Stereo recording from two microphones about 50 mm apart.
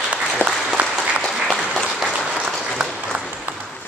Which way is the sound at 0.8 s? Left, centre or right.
Right.